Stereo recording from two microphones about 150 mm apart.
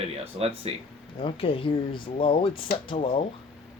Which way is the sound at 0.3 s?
45° right (ahead or behind).